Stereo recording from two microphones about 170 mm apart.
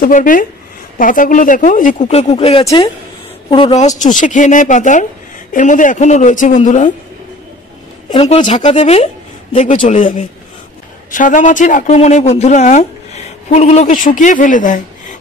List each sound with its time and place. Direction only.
0.0 s speech: 55° left (ahead or behind); by 2.6 s 35° left (ahead or behind)
2.6 s speech: 20° left (ahead or behind)
3.4 s speech: 30° left (ahead or behind); by 6.9 s 45° left (ahead or behind)
8.1 s speech: 30° left (ahead or behind); by 15.1 s 50° left (ahead or behind)